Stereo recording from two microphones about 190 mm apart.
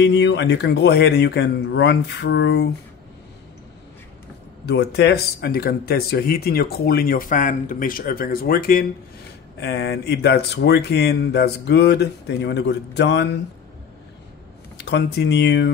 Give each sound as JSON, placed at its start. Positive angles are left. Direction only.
{"t": 0.0, "sound": "speech", "side_deg": 65}
{"t": 4.6, "sound": "speech", "side_deg": 60}
{"t": 14.8, "sound": "speech", "side_deg": 60}